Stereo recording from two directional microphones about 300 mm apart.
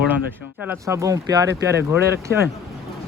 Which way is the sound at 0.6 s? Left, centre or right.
Centre.